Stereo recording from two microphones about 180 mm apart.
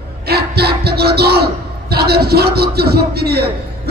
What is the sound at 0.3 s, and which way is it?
Speech, 60° right (ahead or behind).